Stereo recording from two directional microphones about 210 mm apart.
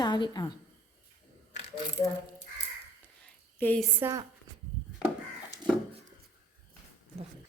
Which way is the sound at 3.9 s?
10° right (ahead or behind).